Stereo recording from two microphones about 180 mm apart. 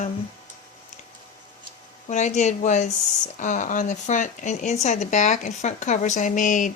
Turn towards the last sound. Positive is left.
turn(degrees=45)  # may be behind; listen again after turning